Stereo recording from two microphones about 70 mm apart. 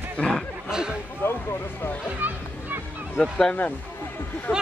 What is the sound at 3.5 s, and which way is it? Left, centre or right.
Speech, left.